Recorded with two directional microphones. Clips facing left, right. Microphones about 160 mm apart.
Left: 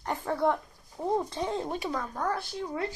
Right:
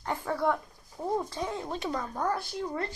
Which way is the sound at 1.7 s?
10° left (ahead or behind).